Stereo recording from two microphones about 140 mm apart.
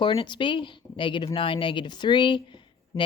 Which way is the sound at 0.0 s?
35° left (ahead or behind).